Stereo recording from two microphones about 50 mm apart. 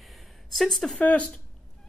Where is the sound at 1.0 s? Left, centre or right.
Left.